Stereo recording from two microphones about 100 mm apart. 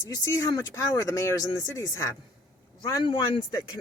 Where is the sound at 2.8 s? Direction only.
45° left (ahead or behind).